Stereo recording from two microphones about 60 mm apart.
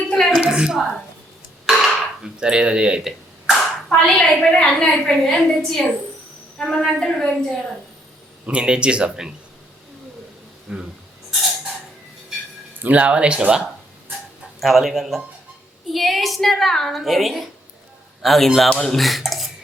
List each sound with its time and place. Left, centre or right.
0.2 s a sound: centre
2.4 s speech: centre
3.0 s a sound: centre
3.8 s a woman's voice: centre
8.4 s speech: centre
10.7 s speech: centre
12.8 s speech: right
14.6 s a woman's voice: centre
18.7 s a woman's voice: centre
18.9 s speech: centre